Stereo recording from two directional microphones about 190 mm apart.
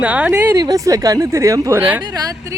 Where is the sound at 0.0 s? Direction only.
5° right (ahead or behind).